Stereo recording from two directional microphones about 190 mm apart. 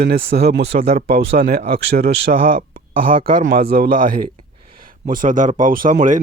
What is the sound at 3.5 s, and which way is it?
Speech, 55° right (ahead or behind).